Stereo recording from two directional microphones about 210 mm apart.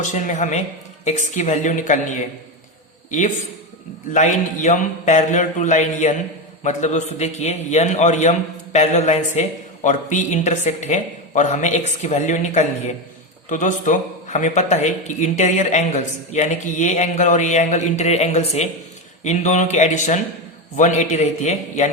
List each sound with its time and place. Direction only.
0.0 s a man's voice: 35° left (ahead or behind)
3.1 s a man's voice: 35° left (ahead or behind)